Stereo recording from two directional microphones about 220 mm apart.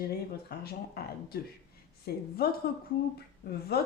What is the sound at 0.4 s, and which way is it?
Speech, 45° left (ahead or behind).